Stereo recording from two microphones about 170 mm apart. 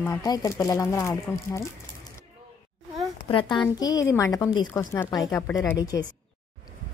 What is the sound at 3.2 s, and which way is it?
Speech, 30° left (ahead or behind).